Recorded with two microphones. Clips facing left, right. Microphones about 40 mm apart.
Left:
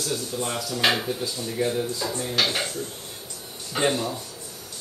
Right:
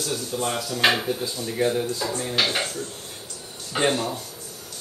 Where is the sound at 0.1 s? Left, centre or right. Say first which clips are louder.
Right 3 dB; right.